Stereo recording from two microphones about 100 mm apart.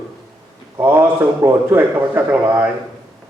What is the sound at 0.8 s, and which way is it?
A man's voice, 20° right (ahead or behind).